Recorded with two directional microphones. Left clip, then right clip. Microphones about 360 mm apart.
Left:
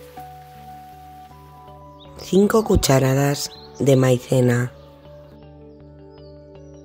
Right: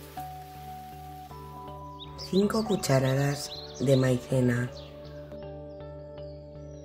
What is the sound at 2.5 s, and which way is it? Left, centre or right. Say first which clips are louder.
Speech: left 10 dB; left.